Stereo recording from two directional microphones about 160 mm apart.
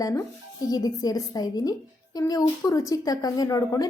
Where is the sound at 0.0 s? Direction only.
20° left (ahead or behind).